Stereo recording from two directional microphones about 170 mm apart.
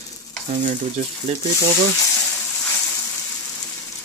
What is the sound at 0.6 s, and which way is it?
Speech, 45° right (ahead or behind).